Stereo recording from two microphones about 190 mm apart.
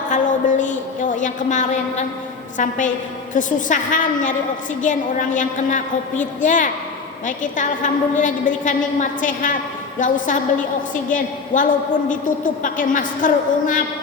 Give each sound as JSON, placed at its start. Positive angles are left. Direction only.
{"t": 0.1, "sound": "a woman's voice", "side_deg": 40}